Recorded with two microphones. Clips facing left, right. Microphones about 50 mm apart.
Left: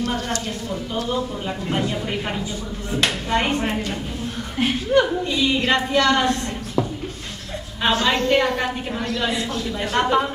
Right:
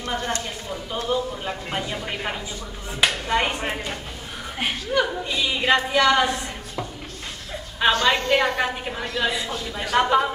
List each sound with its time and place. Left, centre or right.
0.0 s speech: right
1.0 s a woman's voice: centre
7.8 s a woman's voice: centre